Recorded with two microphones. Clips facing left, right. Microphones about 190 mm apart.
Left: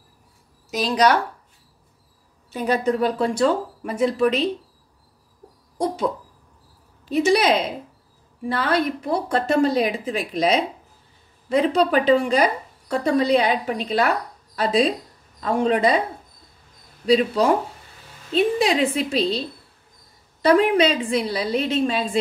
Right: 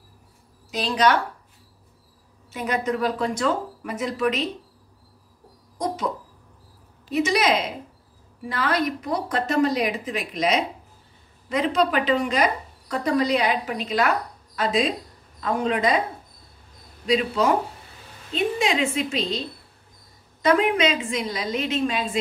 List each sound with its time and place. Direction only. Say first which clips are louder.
0.7 s a woman's voice: left 2 dB; 40° left (ahead or behind)
2.5 s a woman's voice: left 4 dB; 35° left (ahead or behind)
7.1 s a woman's voice: left 3 dB; 30° left (ahead or behind)
17.0 s a woman's voice: left 4 dB; 35° left (ahead or behind)
20.4 s a woman's voice: left 3 dB; 35° left (ahead or behind)